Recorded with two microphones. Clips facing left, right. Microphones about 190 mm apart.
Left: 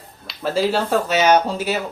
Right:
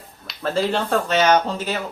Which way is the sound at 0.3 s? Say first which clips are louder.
Left 2 dB; 5° left (ahead or behind).